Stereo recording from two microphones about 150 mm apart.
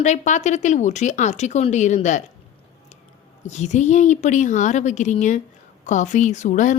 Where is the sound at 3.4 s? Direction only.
50° left (ahead or behind).